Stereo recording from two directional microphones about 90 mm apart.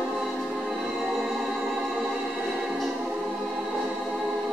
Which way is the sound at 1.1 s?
5° right (ahead or behind).